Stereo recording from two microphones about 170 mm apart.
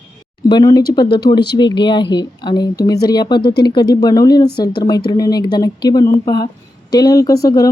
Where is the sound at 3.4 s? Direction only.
75° left (ahead or behind).